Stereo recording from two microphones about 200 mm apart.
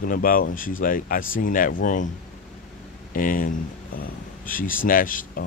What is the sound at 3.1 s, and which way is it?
Speech, 45° left (ahead or behind).